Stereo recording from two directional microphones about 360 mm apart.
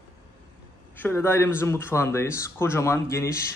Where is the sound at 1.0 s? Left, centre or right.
Centre.